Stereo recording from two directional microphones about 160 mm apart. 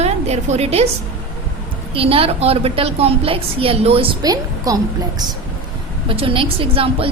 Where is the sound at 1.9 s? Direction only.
35° right (ahead or behind).